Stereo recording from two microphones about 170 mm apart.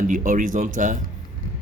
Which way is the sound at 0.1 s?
50° right (ahead or behind).